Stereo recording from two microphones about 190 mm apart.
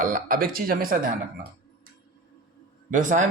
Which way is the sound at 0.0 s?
45° right (ahead or behind).